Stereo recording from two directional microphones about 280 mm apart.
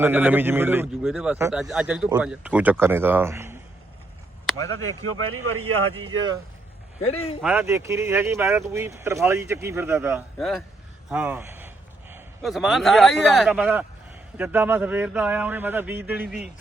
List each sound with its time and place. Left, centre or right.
0.0 s speech: centre
4.7 s speech: right
7.4 s a man's voice: centre